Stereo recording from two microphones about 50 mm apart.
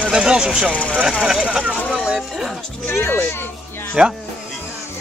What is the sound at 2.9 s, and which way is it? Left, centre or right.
Speech, left.